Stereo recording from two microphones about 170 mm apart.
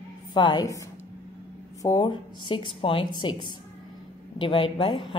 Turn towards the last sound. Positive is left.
turn(degrees=30)  # may be behind; listen again after turning